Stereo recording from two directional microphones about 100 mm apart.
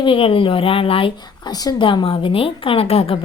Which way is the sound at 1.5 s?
40° left (ahead or behind).